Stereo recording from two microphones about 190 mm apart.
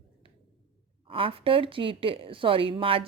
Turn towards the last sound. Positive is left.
turn(degrees=-30)  # may be behind; listen again after turning